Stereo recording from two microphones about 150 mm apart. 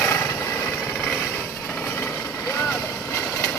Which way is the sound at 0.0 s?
15° left (ahead or behind).